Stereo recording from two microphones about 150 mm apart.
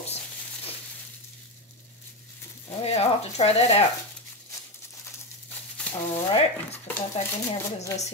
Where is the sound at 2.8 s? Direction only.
45° left (ahead or behind).